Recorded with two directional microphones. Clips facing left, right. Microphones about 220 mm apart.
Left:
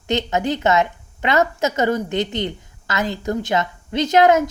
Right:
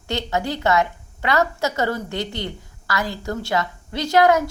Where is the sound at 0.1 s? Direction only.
20° left (ahead or behind).